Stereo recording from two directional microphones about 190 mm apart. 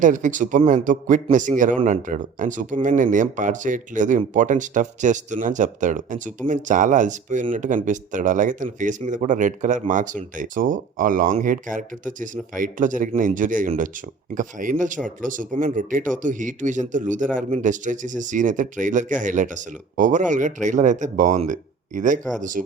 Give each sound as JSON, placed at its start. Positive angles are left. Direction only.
{"t": 0.0, "sound": "speech", "side_deg": -40}